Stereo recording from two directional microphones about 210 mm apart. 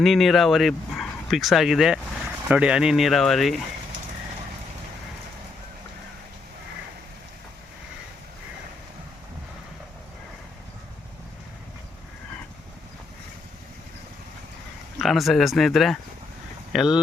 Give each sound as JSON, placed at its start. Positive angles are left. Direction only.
{"t": 0.0, "sound": "speech", "side_deg": 0}
{"t": 14.9, "sound": "speech", "side_deg": 0}